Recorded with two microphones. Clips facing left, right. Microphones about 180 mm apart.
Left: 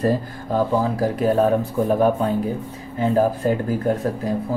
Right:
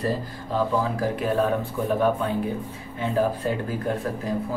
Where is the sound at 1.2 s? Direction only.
40° left (ahead or behind).